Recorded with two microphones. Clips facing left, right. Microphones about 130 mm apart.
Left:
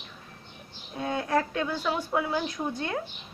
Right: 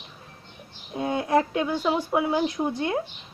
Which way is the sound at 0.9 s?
20° right (ahead or behind).